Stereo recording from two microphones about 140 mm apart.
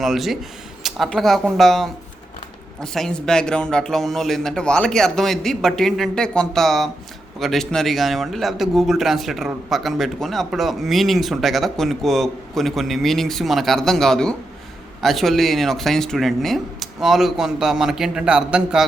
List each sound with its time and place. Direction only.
0.0 s a man's voice: centre (ahead or behind)